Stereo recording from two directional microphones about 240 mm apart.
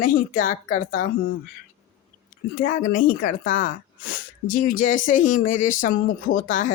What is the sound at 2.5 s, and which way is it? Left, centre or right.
Speech, left.